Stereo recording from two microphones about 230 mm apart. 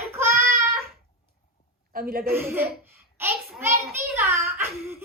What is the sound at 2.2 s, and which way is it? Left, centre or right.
A child's voice, centre.